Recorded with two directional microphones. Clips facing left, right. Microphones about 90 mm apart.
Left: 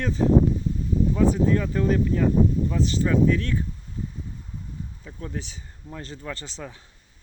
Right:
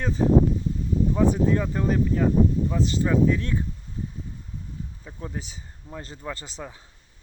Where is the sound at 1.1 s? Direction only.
20° right (ahead or behind).